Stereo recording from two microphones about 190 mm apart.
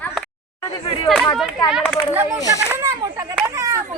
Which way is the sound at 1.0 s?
Centre (ahead or behind).